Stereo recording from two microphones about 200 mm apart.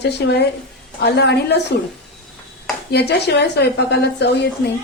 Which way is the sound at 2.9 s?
55° left (ahead or behind).